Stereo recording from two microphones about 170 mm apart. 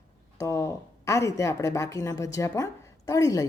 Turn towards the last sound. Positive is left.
turn(degrees=20)  # may be behind; listen again after turning